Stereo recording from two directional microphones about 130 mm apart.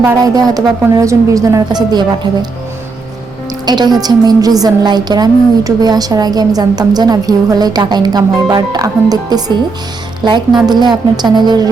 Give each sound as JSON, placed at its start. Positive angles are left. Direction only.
{"t": 0.0, "sound": "a woman's voice", "side_deg": -30}
{"t": 3.7, "sound": "a woman's voice", "side_deg": -30}